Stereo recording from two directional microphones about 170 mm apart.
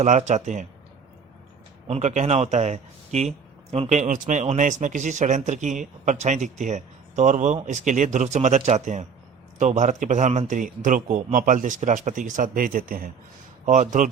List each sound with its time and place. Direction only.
0.0 s speech: 45° right (ahead or behind)
1.9 s speech: 40° right (ahead or behind)